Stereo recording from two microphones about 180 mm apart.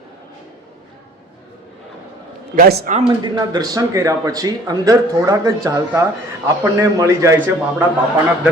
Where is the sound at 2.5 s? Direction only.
60° right (ahead or behind).